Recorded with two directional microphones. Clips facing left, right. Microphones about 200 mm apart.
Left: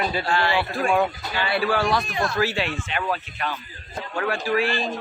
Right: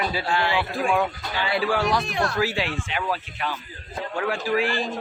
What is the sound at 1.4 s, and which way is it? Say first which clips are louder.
Speech: left 1 dB; 15° right (ahead or behind).